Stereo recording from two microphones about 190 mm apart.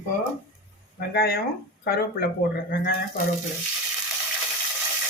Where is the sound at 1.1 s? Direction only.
55° left (ahead or behind).